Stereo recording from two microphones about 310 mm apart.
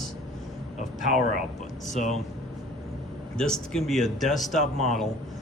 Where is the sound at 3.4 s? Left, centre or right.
Centre.